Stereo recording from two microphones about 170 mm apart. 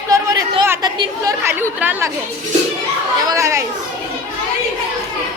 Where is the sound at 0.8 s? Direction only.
25° right (ahead or behind).